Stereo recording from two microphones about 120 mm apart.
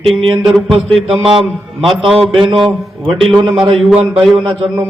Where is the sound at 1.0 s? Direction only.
45° right (ahead or behind).